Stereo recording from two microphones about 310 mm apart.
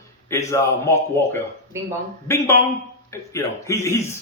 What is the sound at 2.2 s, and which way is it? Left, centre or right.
A man's voice, centre.